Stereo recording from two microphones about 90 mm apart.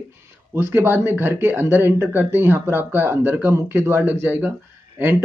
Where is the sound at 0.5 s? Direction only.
25° right (ahead or behind).